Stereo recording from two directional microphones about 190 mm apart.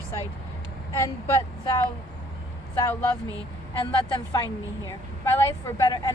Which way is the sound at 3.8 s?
25° left (ahead or behind).